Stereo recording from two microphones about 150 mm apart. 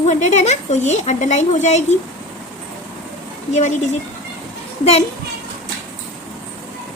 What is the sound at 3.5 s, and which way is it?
Speech, 50° left (ahead or behind).